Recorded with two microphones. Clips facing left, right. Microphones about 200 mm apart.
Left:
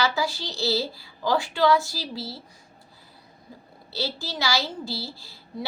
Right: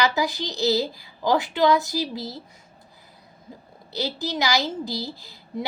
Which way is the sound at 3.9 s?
15° right (ahead or behind).